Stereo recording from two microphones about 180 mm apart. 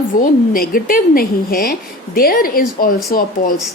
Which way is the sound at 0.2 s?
50° left (ahead or behind).